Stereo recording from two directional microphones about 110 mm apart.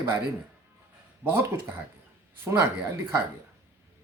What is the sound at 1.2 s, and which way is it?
Speech, 20° right (ahead or behind).